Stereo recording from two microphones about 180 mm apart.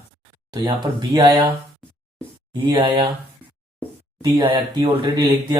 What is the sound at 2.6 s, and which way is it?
Speech, 25° right (ahead or behind).